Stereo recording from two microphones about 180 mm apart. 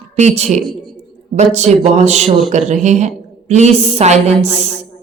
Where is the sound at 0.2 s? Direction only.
40° right (ahead or behind).